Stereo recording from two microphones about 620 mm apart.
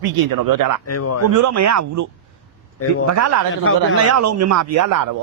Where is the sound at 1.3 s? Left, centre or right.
Right.